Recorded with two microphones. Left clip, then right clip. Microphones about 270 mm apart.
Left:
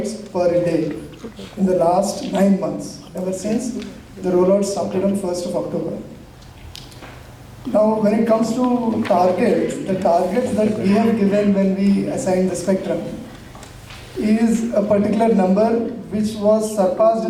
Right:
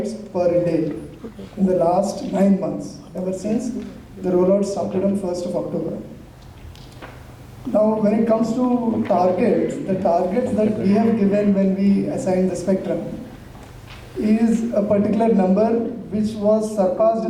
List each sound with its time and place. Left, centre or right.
0.4 s a man's voice: centre
1.6 s a man's voice: centre
2.0 s a man's voice: centre
2.5 s a man's voice: centre
3.3 s a man's voice: centre
4.2 s a man's voice: centre
5.5 s a man's voice: centre
7.7 s a man's voice: centre
8.0 s a man's voice: centre
8.7 s speech: right
9.0 s a man's voice: centre
14.2 s a man's voice: centre
16.8 s a man's voice: centre